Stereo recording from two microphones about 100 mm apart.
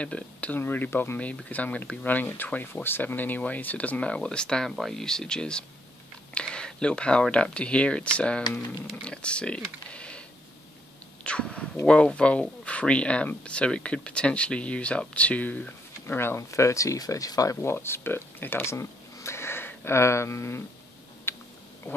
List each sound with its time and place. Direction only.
0.0 s speech: 15° left (ahead or behind)
11.2 s speech: 10° left (ahead or behind); by 20.6 s 30° left (ahead or behind)
21.3 s a sound: 25° left (ahead or behind)